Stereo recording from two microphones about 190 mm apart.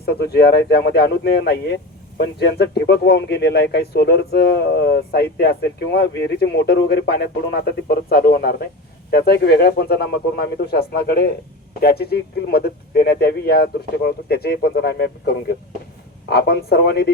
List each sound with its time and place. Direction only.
0.0 s speech: 55° left (ahead or behind)